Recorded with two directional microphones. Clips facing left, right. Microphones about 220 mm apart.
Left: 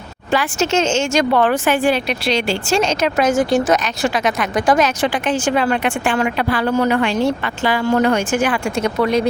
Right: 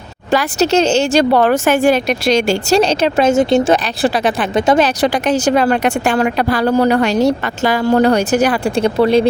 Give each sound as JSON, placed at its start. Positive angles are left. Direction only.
{"t": 0.3, "sound": "speech", "side_deg": -40}
{"t": 4.9, "sound": "speech", "side_deg": -40}